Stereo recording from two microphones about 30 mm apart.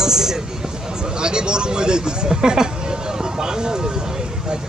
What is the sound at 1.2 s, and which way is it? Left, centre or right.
Speech, right.